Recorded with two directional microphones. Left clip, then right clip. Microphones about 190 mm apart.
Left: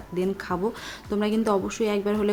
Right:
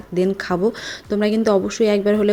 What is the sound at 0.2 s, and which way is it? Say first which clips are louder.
Speech: right 8 dB; 25° right (ahead or behind).